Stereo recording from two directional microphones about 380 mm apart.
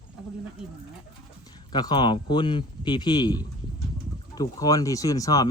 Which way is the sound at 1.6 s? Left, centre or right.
Centre.